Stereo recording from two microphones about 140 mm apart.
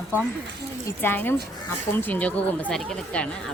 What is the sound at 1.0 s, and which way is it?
Speech, 15° left (ahead or behind).